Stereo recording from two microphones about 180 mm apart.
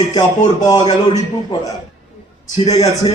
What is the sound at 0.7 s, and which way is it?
Speech, 25° left (ahead or behind).